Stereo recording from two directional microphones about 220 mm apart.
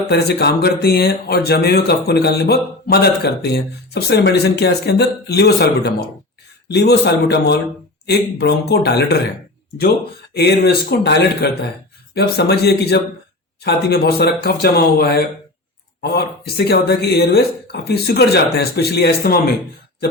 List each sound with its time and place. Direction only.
0.1 s speech: 50° left (ahead or behind)
10.3 s speech: 45° left (ahead or behind)